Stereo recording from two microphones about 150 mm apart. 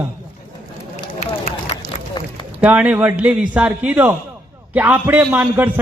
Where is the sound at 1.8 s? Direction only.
75° left (ahead or behind).